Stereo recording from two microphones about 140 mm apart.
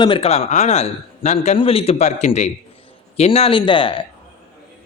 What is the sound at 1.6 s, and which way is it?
A man's voice, 40° left (ahead or behind).